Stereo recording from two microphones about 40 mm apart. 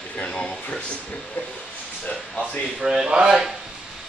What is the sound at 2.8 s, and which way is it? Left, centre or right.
Speech, centre.